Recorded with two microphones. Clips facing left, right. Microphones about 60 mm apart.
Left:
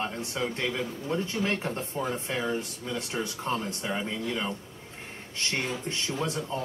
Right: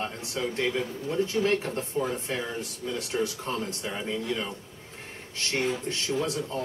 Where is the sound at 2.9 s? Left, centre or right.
Left.